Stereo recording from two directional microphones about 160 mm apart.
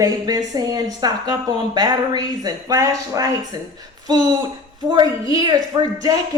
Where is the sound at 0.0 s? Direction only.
25° right (ahead or behind).